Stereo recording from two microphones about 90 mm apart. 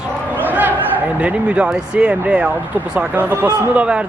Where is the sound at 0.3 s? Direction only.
20° right (ahead or behind).